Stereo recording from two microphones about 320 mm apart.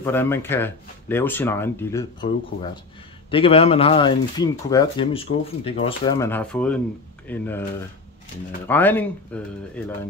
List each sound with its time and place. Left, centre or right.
0.0 s speech: centre
3.3 s speech: centre
8.6 s speech: centre